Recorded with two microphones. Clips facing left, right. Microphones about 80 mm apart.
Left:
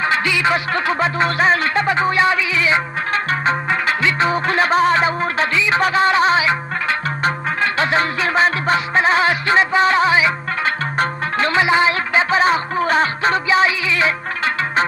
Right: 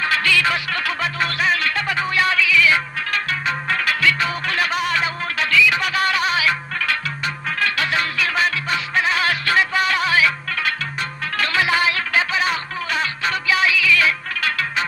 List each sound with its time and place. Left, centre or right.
0.0 s music: left